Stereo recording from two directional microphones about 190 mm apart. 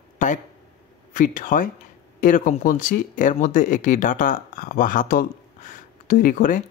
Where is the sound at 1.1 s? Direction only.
45° left (ahead or behind).